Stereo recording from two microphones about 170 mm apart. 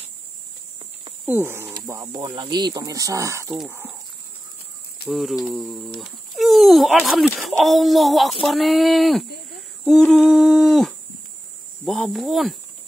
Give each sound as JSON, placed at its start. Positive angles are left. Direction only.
{"t": 1.2, "sound": "livestock", "side_deg": -10}
{"t": 1.7, "sound": "speech", "side_deg": -25}
{"t": 3.5, "sound": "livestock", "side_deg": -10}
{"t": 5.0, "sound": "speech", "side_deg": 0}
{"t": 9.6, "sound": "a sound", "side_deg": 0}
{"t": 11.8, "sound": "speech", "side_deg": 0}